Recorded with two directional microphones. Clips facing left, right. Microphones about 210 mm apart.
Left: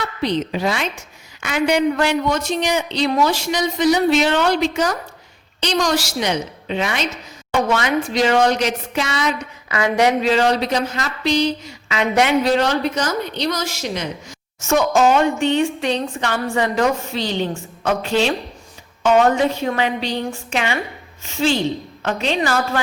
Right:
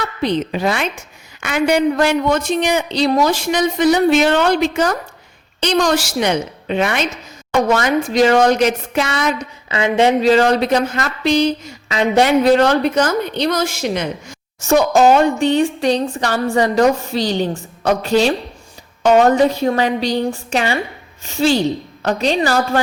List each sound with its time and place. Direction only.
0.2 s speech: 55° right (ahead or behind)
2.9 s a woman's voice: 35° right (ahead or behind); by 7.1 s 55° right (ahead or behind)
7.7 s speech: 45° right (ahead or behind)
9.6 s speech: 25° right (ahead or behind); by 11.9 s 50° right (ahead or behind)
11.9 s a woman's voice: 35° right (ahead or behind)
12.4 s speech: 55° right (ahead or behind)
14.6 s a woman's voice: 35° right (ahead or behind)